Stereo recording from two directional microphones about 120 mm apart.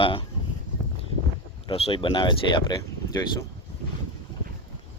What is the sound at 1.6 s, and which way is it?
Speech, 50° left (ahead or behind).